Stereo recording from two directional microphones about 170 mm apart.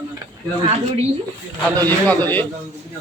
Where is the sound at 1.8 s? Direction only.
10° left (ahead or behind).